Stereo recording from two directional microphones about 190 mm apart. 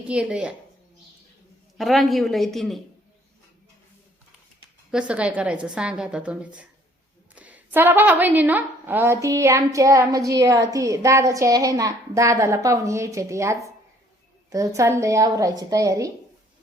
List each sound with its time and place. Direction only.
0.1 s a woman's voice: 5° right (ahead or behind)
1.8 s a woman's voice: centre (ahead or behind)
4.9 s a woman's voice: 5° right (ahead or behind)